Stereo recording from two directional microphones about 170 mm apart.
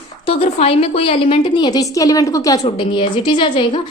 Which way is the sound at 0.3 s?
35° left (ahead or behind).